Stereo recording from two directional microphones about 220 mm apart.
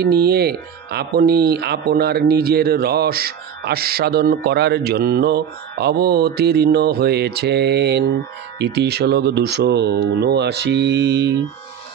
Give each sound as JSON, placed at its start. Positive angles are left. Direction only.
{"t": 0.0, "sound": "speech", "side_deg": -45}